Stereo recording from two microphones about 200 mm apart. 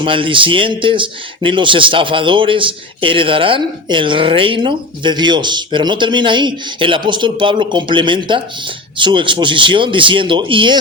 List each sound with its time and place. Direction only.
0.0 s speech: 25° right (ahead or behind)